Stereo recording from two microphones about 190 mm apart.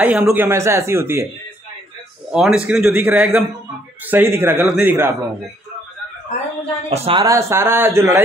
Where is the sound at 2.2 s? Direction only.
Centre (ahead or behind).